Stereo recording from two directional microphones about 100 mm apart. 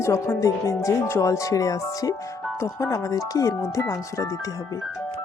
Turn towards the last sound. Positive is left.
turn(degrees=35)  # may be behind; listen again after turning